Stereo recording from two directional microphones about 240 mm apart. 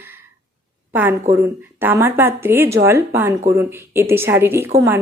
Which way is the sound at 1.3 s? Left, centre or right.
Centre.